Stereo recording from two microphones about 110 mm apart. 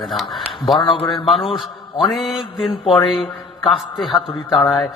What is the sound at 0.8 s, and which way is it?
Speech, 50° left (ahead or behind).